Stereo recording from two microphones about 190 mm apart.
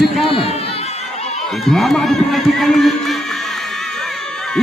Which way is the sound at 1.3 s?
Centre (ahead or behind).